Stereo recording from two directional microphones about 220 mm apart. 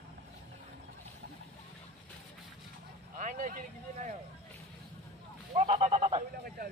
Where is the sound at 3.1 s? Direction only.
35° right (ahead or behind).